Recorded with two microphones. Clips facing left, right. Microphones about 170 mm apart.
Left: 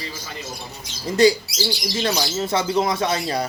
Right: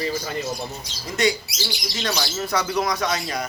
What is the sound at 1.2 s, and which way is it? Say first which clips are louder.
A man's voice: left 6 dB; 30° left (ahead or behind).